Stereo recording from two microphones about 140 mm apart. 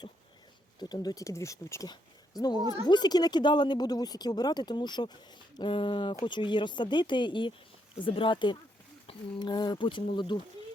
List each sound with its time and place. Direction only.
0.8 s speech: 30° left (ahead or behind)